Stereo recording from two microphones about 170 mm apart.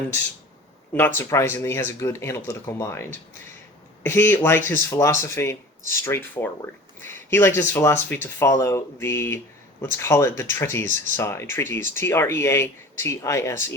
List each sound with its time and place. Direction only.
0.9 s speech: 15° left (ahead or behind)